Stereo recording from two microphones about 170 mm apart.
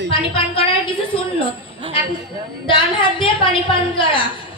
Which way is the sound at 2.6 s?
30° left (ahead or behind).